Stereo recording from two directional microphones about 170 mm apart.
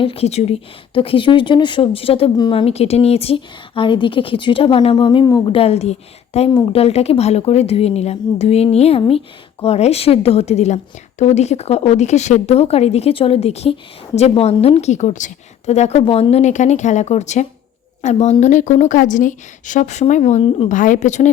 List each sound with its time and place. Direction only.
0.0 s speech: 35° left (ahead or behind)
5.5 s a woman's voice: 35° left (ahead or behind)